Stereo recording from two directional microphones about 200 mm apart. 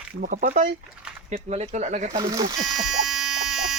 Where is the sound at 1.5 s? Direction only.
35° right (ahead or behind).